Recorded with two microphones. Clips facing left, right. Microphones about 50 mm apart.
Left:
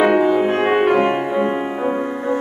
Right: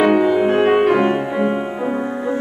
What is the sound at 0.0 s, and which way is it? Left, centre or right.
Music, centre.